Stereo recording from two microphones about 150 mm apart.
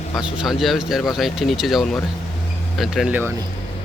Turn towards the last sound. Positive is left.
turn(degrees=0)  # may be behind; listen again after turning